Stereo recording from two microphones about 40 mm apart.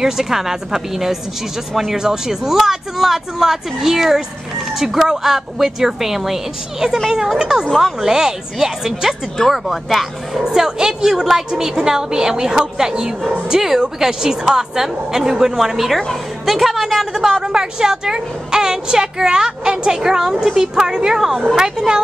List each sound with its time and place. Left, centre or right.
0.0 s a woman's voice: centre
9.5 s speech: centre
10.4 s a woman's voice: centre
17.1 s a woman's voice: centre